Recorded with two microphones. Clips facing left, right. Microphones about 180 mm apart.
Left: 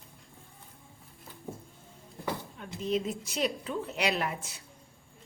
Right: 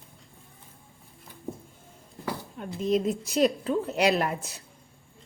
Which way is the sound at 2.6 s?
40° right (ahead or behind).